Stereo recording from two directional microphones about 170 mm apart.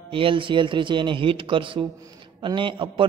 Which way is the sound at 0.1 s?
30° right (ahead or behind).